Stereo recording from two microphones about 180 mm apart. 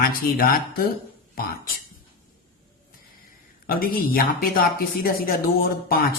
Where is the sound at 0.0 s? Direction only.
55° left (ahead or behind).